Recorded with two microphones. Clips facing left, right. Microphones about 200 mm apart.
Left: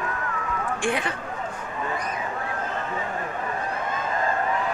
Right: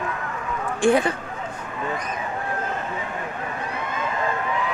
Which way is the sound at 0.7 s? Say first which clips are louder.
Right 10 dB; 40° right (ahead or behind).